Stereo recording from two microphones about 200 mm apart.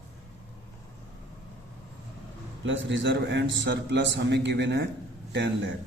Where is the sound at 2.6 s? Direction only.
70° right (ahead or behind).